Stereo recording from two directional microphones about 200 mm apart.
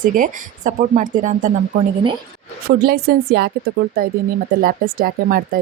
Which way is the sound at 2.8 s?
50° right (ahead or behind).